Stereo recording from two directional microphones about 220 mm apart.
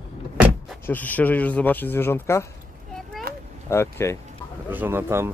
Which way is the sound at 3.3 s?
45° right (ahead or behind).